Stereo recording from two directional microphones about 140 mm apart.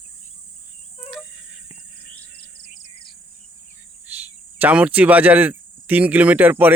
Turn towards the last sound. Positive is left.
turn(degrees=-15)  # may be behind; listen again after turning